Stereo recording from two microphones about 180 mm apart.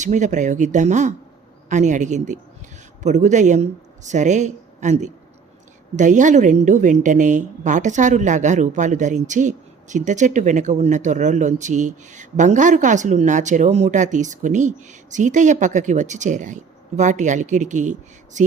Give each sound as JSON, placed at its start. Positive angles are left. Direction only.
{"t": 0.0, "sound": "a woman's voice", "side_deg": -40}